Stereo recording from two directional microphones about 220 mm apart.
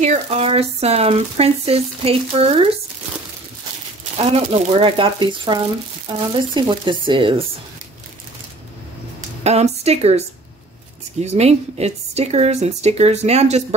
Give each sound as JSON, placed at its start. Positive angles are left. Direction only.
{"t": 0.0, "sound": "speech", "side_deg": -30}
{"t": 4.3, "sound": "speech", "side_deg": -25}
{"t": 9.4, "sound": "speech", "side_deg": -30}
{"t": 11.2, "sound": "speech", "side_deg": -30}